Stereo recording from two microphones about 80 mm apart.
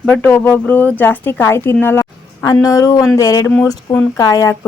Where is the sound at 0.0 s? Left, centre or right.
Centre.